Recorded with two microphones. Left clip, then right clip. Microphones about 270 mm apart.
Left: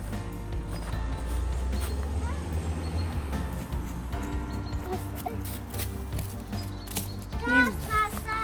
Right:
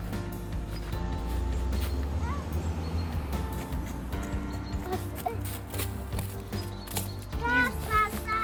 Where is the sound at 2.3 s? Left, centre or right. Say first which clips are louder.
Right 1 dB; left.